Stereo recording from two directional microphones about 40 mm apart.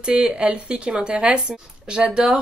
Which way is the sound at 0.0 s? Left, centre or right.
Right.